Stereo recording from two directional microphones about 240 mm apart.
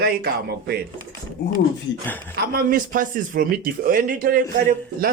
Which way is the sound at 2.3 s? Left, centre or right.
Right.